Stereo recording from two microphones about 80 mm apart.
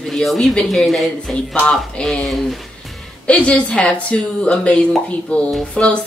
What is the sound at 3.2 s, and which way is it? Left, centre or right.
Speech, centre.